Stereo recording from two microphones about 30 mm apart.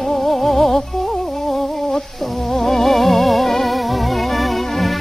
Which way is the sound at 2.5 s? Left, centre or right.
Centre.